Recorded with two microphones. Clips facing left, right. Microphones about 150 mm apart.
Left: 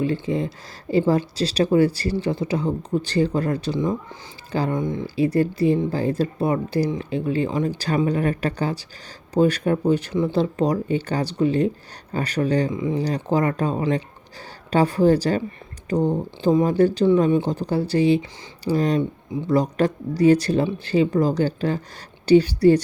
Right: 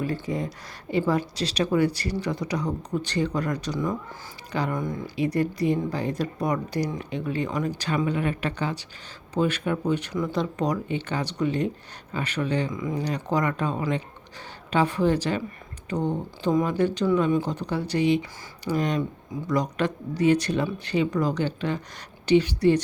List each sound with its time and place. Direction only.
0.0 s speech: 25° left (ahead or behind)